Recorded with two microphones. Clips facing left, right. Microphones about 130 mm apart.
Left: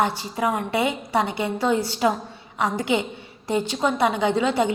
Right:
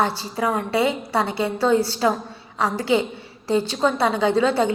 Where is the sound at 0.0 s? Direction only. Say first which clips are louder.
Right 1 dB; 15° left (ahead or behind).